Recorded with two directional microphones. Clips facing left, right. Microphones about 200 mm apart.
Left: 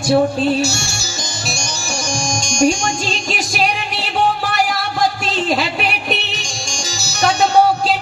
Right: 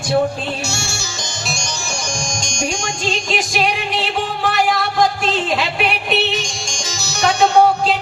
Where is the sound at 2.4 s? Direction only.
50° left (ahead or behind).